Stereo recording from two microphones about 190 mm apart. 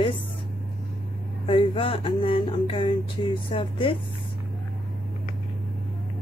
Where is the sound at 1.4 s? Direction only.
30° left (ahead or behind).